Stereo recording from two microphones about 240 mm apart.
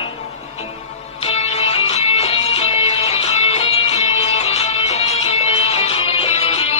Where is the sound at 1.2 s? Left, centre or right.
Left.